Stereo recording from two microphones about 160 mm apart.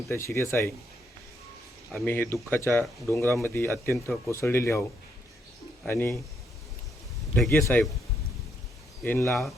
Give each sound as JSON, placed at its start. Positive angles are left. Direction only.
{"t": 0.1, "sound": "speech", "side_deg": 15}
{"t": 1.9, "sound": "speech", "side_deg": 10}
{"t": 5.9, "sound": "speech", "side_deg": 15}
{"t": 7.5, "sound": "speech", "side_deg": 10}
{"t": 9.0, "sound": "speech", "side_deg": 15}
{"t": 9.3, "sound": "speech", "side_deg": 0}